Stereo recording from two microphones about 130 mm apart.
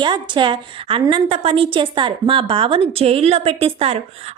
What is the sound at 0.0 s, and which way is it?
A woman's voice, 35° right (ahead or behind).